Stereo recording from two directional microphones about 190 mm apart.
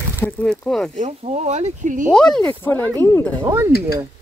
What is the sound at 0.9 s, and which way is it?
Speech, 35° right (ahead or behind).